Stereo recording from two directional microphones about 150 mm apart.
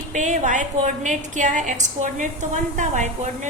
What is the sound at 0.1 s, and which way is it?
A woman's voice, 55° right (ahead or behind).